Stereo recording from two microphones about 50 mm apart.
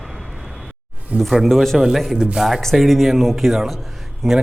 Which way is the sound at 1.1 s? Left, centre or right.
Right.